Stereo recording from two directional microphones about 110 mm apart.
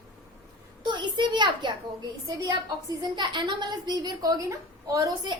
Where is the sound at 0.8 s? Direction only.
45° right (ahead or behind).